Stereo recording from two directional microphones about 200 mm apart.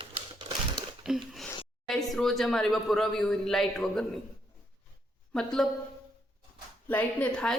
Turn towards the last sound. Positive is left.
turn(degrees=5)  # may be behind; listen again after turning